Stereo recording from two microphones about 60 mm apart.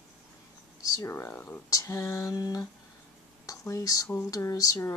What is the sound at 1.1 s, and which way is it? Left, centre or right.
Speech, left.